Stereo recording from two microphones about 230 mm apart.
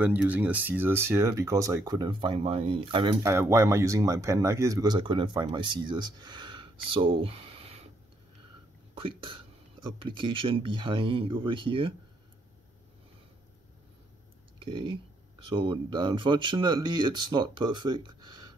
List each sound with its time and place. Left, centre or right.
0.0 s speech: centre; by 7.9 s right
8.9 s speech: right
14.6 s speech: right